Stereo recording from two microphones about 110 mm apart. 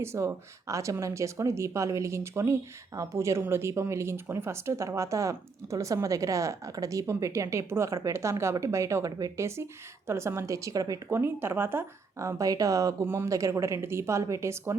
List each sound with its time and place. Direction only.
0.0 s speech: 25° right (ahead or behind)